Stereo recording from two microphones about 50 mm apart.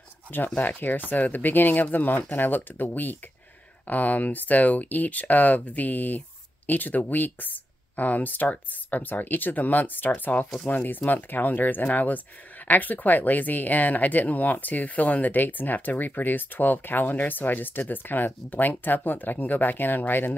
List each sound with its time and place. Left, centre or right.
0.6 s speech: left